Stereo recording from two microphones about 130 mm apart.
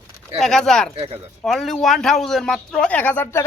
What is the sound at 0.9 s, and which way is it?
Speech, 50° right (ahead or behind).